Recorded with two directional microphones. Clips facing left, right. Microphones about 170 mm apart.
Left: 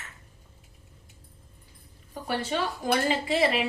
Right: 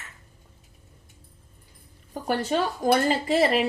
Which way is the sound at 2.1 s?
40° right (ahead or behind).